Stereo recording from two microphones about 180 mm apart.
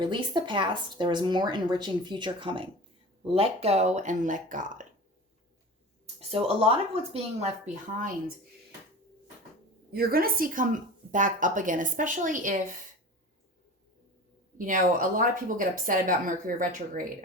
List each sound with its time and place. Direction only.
0.0 s speech: 25° right (ahead or behind); by 4.9 s 45° right (ahead or behind)
6.1 s speech: 35° right (ahead or behind)
9.9 s speech: 55° right (ahead or behind)
14.6 s speech: 50° right (ahead or behind)